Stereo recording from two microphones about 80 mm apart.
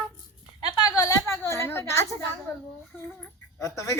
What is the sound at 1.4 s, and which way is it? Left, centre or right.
Speech, left.